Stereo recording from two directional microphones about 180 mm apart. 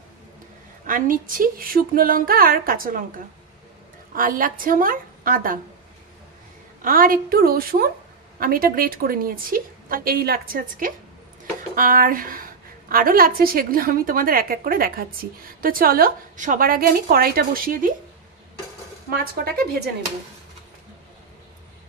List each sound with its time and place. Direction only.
0.8 s a woman's voice: 50° right (ahead or behind)
4.1 s a woman's voice: 50° right (ahead or behind)
6.8 s a woman's voice: 50° right (ahead or behind)
19.3 s a woman's voice: 55° right (ahead or behind)